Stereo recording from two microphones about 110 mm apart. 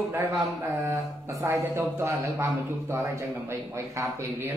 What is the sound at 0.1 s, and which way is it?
A man's voice, 25° right (ahead or behind).